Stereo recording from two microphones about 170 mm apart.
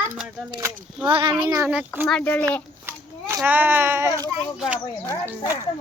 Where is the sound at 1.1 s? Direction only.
30° right (ahead or behind).